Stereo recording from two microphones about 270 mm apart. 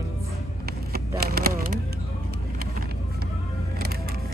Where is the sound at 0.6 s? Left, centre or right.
Right.